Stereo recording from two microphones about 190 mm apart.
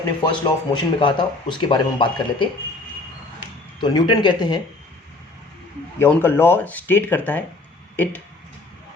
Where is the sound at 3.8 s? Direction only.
25° left (ahead or behind).